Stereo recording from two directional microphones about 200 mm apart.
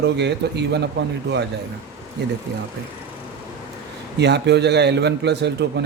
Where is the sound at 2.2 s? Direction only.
55° right (ahead or behind).